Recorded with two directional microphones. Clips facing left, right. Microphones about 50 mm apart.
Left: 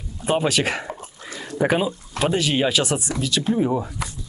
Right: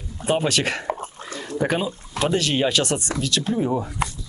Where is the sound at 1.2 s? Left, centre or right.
Right.